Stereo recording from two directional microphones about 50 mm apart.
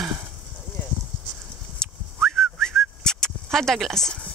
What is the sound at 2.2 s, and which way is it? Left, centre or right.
Whistling, centre.